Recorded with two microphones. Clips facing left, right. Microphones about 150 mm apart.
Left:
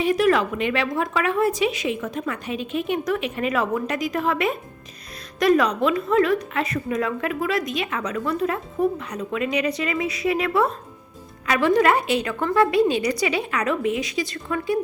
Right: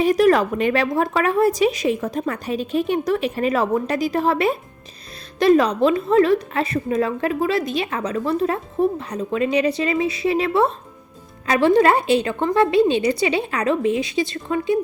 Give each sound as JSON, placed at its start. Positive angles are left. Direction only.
{"t": 0.0, "sound": "a woman's voice", "side_deg": -40}